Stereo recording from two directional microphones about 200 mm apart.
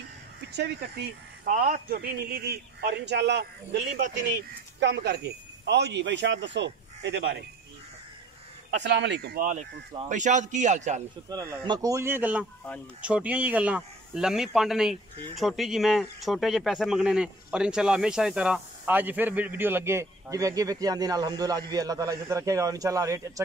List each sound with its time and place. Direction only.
0.6 s speech: 50° right (ahead or behind)
8.8 s a man's voice: 60° right (ahead or behind); by 11.1 s 35° right (ahead or behind)
11.2 s speech: 15° right (ahead or behind)